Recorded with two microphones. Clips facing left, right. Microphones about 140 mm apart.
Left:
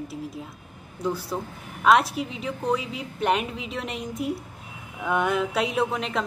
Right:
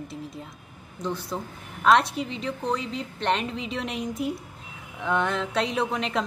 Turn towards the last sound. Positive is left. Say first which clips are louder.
# left 1 dB
turn(degrees=0)  # may be behind; listen again after turning